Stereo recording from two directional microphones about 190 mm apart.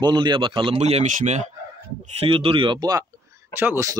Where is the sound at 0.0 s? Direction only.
25° right (ahead or behind).